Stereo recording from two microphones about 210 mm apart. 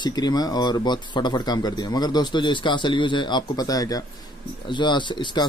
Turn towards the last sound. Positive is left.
turn(degrees=20)  # may be behind; listen again after turning